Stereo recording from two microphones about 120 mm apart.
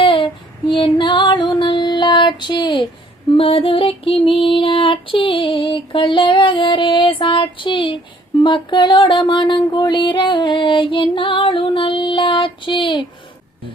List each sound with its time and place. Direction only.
0.0 s child singing: 45° left (ahead or behind)
0.7 s female singing: 40° left (ahead or behind)
3.3 s female singing: 50° left (ahead or behind)